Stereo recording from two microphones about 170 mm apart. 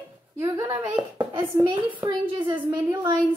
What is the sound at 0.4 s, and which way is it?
A woman's voice, 20° right (ahead or behind).